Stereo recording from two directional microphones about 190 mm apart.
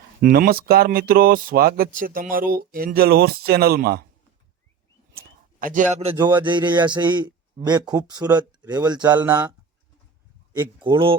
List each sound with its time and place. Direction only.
0.2 s speech: 50° right (ahead or behind)
5.1 s a man's voice: 45° right (ahead or behind); by 9.0 s 20° right (ahead or behind)
9.0 s speech: 10° right (ahead or behind)
10.8 s speech: 25° right (ahead or behind)